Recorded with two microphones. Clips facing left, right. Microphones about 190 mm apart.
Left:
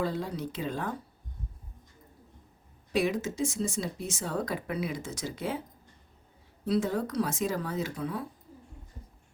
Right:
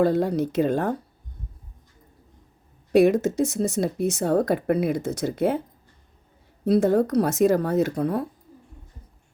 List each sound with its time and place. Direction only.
0.0 s speech: 65° right (ahead or behind)
2.9 s speech: 60° right (ahead or behind)
6.7 s speech: 60° right (ahead or behind)